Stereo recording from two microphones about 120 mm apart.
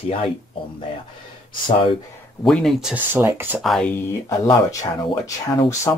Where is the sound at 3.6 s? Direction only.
Centre (ahead or behind).